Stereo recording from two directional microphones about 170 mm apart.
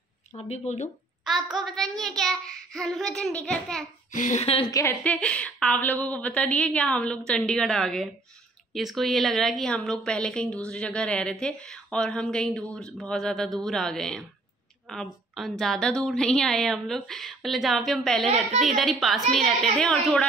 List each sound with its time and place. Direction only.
0.4 s speech: 40° left (ahead or behind)
1.8 s a woman's voice: centre (ahead or behind)
4.1 s speech: 45° left (ahead or behind)
4.6 s a woman's voice: 20° left (ahead or behind)
5.0 s a woman's voice: 5° left (ahead or behind)